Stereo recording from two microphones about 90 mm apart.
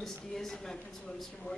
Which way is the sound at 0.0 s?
5° left (ahead or behind).